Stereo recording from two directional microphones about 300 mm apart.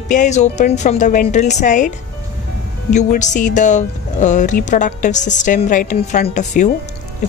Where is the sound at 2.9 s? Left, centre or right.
Left.